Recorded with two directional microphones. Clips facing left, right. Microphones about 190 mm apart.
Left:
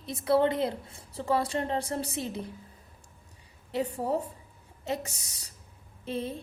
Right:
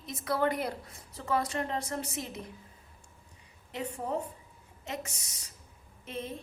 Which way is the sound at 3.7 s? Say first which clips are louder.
Left 5 dB; 35° left (ahead or behind).